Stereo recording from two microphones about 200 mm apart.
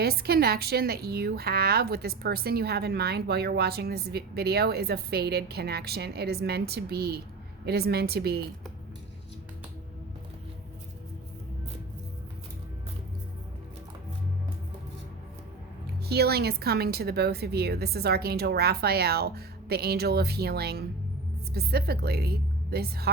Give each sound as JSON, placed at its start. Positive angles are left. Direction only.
{"t": 0.0, "sound": "a woman's voice", "side_deg": -50}
{"t": 16.0, "sound": "a woman's voice", "side_deg": -50}